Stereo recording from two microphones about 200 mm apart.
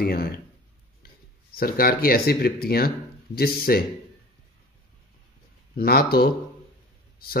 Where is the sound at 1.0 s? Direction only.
50° left (ahead or behind).